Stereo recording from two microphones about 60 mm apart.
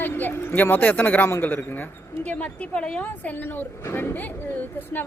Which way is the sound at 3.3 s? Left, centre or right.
Left.